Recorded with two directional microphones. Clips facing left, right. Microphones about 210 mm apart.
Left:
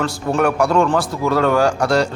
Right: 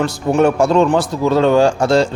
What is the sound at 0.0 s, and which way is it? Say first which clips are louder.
Speech: right 4 dB; 20° right (ahead or behind).